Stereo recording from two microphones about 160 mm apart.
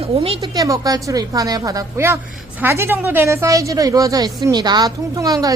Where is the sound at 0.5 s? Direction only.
20° right (ahead or behind).